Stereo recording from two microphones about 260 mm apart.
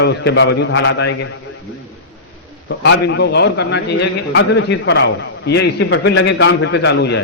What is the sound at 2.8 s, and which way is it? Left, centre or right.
A man's voice, left.